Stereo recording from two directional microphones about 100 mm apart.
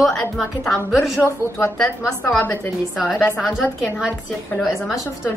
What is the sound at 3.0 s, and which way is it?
Speech, centre (ahead or behind).